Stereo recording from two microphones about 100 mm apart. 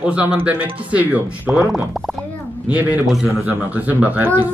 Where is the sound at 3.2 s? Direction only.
15° right (ahead or behind).